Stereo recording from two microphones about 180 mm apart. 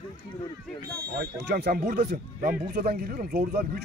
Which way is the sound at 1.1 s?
65° right (ahead or behind).